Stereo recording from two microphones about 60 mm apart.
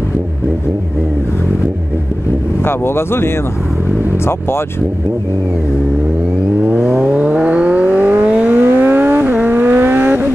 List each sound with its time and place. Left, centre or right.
2.6 s speech: left
6.6 s vehicle: centre